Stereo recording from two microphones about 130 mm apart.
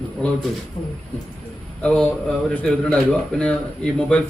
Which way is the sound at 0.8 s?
35° left (ahead or behind).